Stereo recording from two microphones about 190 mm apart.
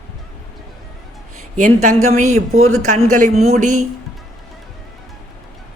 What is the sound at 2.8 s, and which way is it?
Speech, 40° right (ahead or behind).